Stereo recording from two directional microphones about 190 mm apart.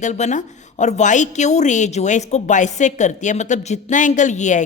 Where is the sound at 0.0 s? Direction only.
40° left (ahead or behind).